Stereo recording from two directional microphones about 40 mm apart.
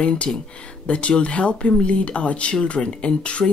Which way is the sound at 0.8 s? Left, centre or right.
Left.